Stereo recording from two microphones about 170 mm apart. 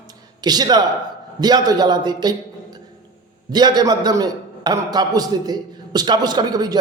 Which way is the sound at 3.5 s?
25° right (ahead or behind).